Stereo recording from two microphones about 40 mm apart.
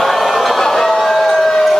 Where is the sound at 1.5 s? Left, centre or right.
Centre.